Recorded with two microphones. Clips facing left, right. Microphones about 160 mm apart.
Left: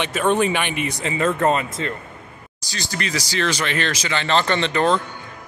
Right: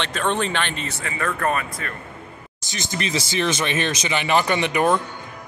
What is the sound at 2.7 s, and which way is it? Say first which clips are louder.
A man's voice: right 1 dB; 20° right (ahead or behind).